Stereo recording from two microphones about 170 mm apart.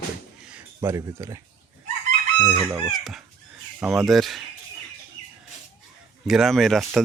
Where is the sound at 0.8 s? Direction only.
20° right (ahead or behind).